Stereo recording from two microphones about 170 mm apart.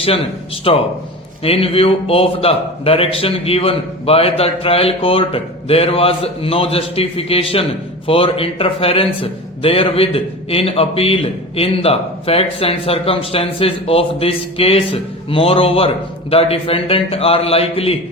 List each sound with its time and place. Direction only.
0.7 s a man's voice: 35° left (ahead or behind)